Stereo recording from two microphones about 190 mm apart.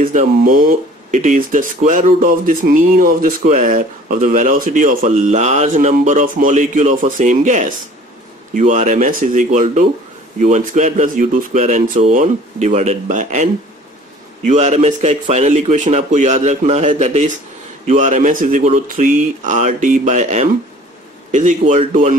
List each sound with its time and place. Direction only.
0.0 s speech: 45° right (ahead or behind)